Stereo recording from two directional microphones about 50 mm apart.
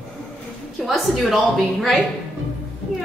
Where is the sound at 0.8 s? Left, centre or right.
Centre.